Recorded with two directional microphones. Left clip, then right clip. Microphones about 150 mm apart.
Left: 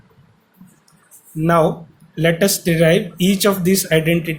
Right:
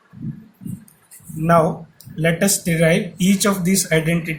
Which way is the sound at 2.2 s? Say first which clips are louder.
Left 3 dB; 60° left (ahead or behind).